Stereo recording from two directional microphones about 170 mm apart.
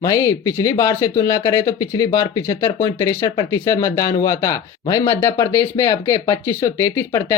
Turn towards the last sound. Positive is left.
turn(degrees=15)  # may be behind; listen again after turning